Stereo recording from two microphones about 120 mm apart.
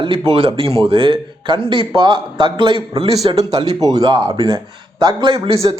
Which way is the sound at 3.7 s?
30° right (ahead or behind).